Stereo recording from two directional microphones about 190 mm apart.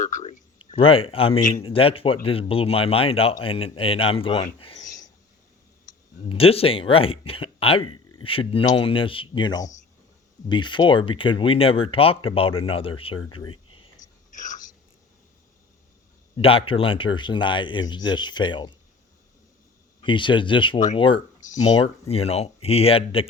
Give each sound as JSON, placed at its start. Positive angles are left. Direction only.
{"t": 0.0, "sound": "speech", "side_deg": 40}
{"t": 0.8, "sound": "speech", "side_deg": 30}
{"t": 6.2, "sound": "speech", "side_deg": 30}
{"t": 14.0, "sound": "whispering", "side_deg": 40}
{"t": 16.4, "sound": "speech", "side_deg": 30}
{"t": 20.0, "sound": "speech", "side_deg": 25}
{"t": 22.0, "sound": "speech", "side_deg": 30}